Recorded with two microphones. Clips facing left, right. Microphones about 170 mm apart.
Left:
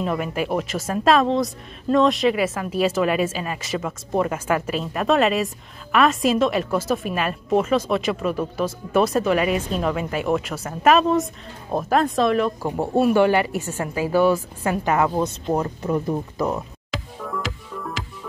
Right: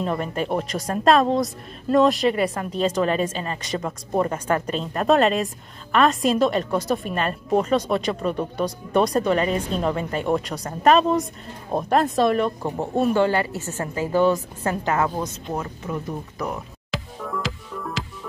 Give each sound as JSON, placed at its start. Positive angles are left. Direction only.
{"t": 0.0, "sound": "a woman's voice", "side_deg": 5}
{"t": 15.5, "sound": "speech", "side_deg": 35}
{"t": 16.9, "sound": "music", "side_deg": 0}